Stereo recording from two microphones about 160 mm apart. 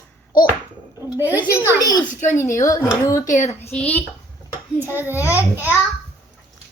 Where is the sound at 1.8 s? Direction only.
25° left (ahead or behind).